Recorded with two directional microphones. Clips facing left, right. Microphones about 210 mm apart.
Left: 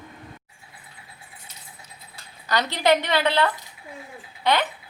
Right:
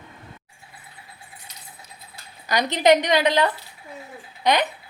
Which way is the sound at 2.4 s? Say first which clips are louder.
Right 3 dB; 15° right (ahead or behind).